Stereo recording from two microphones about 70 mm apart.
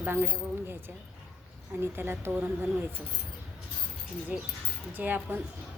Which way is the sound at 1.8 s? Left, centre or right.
Right.